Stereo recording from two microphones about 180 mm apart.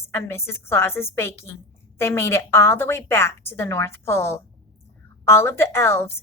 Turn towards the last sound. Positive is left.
turn(degrees=15)  # may be behind; listen again after turning